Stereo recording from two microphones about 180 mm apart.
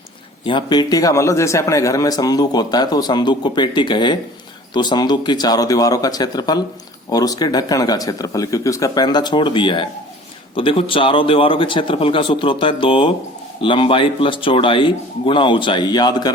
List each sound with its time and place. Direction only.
0.4 s a man's voice: 25° left (ahead or behind)